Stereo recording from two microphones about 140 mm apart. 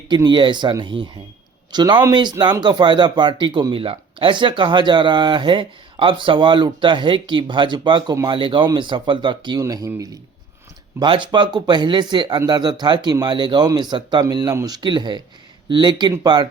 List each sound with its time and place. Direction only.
0.1 s speech: 35° right (ahead or behind)
11.0 s speech: 35° right (ahead or behind)